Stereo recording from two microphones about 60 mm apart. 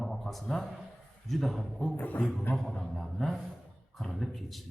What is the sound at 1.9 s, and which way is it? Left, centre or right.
Speech, left.